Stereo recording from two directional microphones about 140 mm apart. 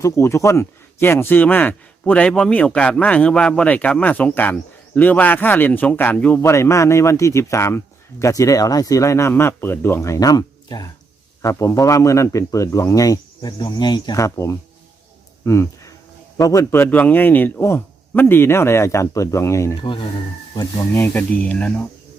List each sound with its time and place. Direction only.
0.0 s speech: 20° left (ahead or behind)
16.8 s speech: 10° left (ahead or behind)
19.8 s speech: 35° left (ahead or behind)
20.6 s speech: 20° left (ahead or behind)